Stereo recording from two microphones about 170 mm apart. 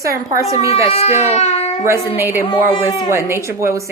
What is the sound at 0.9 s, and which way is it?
Speech, 35° left (ahead or behind).